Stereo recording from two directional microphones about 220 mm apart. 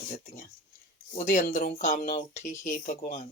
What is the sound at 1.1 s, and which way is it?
Speech, 35° left (ahead or behind).